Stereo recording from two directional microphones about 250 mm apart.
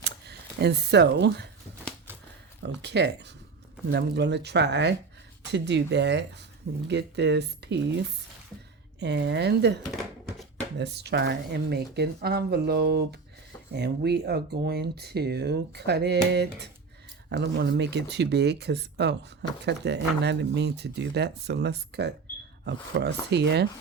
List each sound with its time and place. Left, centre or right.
0.0 s a sound: right
2.6 s speech: right
10.8 s speech: right